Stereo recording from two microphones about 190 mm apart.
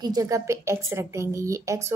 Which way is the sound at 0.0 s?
20° right (ahead or behind).